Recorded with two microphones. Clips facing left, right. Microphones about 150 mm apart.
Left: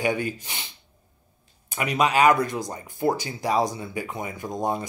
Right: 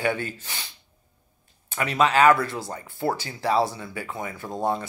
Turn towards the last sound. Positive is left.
turn(degrees=15)  # may be behind; listen again after turning